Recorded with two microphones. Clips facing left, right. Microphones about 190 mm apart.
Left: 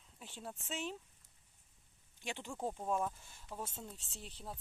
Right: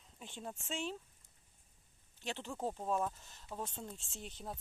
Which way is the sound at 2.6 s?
10° right (ahead or behind).